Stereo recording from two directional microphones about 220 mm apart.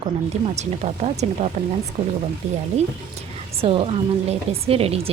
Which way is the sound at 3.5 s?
25° right (ahead or behind).